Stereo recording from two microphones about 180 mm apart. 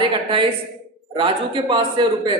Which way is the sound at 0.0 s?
30° right (ahead or behind).